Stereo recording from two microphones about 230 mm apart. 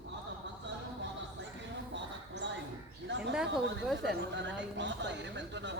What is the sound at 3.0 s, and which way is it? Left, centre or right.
Bird, right.